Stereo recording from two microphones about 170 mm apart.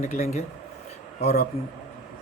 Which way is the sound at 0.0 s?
40° left (ahead or behind).